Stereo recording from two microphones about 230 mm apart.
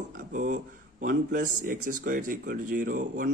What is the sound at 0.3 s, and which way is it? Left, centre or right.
Speech, right.